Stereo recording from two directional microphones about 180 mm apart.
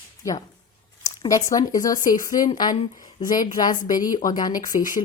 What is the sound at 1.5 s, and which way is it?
A woman's voice, 20° left (ahead or behind).